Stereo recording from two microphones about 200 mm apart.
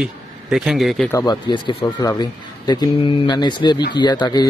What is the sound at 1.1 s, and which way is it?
Speech, 20° left (ahead or behind).